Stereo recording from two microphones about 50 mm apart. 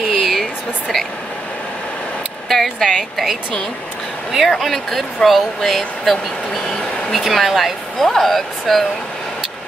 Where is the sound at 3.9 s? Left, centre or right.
Centre.